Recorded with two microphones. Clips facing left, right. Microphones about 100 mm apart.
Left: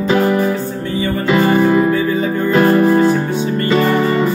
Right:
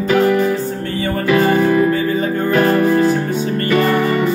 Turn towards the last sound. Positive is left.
turn(degrees=20)  # may be behind; listen again after turning